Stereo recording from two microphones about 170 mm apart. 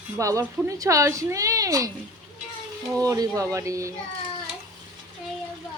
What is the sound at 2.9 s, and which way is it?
Speech, 20° right (ahead or behind).